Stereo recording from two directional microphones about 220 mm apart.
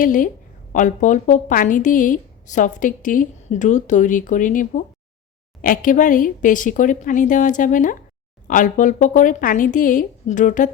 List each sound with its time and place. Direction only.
0.0 s a woman's voice: 35° left (ahead or behind)